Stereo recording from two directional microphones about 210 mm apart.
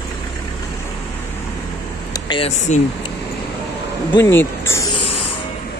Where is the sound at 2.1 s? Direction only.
20° left (ahead or behind).